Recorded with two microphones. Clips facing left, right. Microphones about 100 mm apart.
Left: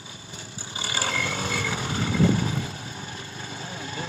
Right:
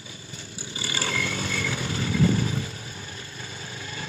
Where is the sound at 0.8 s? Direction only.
25° left (ahead or behind).